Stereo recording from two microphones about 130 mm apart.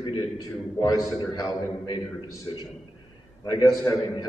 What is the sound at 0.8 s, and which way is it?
Speech, 30° left (ahead or behind).